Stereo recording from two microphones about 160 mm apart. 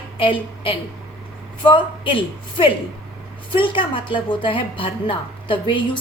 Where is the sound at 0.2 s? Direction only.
35° left (ahead or behind).